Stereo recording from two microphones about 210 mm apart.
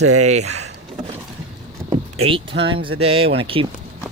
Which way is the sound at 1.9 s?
25° right (ahead or behind).